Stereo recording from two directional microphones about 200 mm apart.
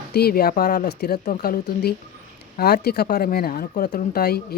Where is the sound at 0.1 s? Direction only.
50° left (ahead or behind).